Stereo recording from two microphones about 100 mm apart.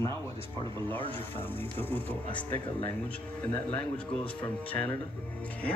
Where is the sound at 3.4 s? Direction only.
10° left (ahead or behind).